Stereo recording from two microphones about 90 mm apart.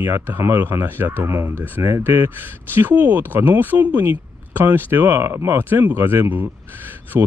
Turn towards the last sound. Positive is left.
turn(degrees=-30)  # may be behind; listen again after turning